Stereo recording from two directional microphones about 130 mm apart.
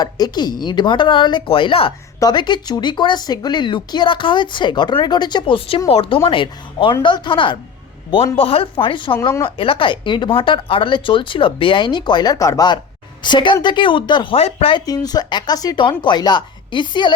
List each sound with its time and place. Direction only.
0.0 s speech: 30° left (ahead or behind)
2.1 s speech: 30° left (ahead or behind)
14.3 s speech: 50° left (ahead or behind)
14.8 s speech: 30° left (ahead or behind)